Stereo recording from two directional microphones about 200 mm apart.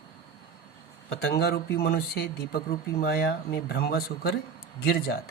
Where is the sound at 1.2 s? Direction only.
55° left (ahead or behind).